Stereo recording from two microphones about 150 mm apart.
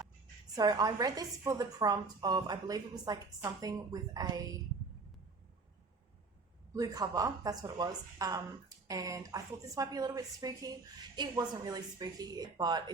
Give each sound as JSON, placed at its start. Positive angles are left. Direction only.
{"t": 0.5, "sound": "a woman's voice", "side_deg": -25}
{"t": 6.7, "sound": "a woman's voice", "side_deg": -25}